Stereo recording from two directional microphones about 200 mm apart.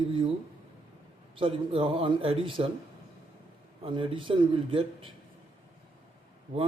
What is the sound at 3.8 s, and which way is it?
A man's voice, 25° right (ahead or behind).